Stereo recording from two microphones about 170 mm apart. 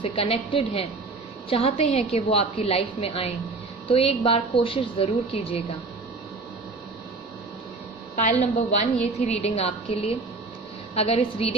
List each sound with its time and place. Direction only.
0.0 s a woman's voice: 35° left (ahead or behind)
8.2 s a woman's voice: 40° left (ahead or behind)